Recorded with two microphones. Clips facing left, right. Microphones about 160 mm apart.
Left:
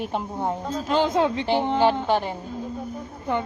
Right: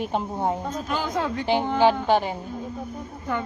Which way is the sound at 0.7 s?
25° left (ahead or behind).